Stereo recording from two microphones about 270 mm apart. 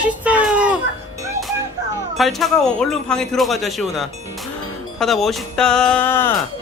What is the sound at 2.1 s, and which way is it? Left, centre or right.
A man's voice, centre.